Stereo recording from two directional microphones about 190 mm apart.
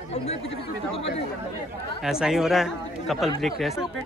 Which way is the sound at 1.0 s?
30° left (ahead or behind).